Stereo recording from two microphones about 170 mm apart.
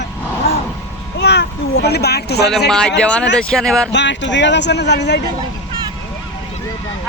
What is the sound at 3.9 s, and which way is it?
Speech, 90° left.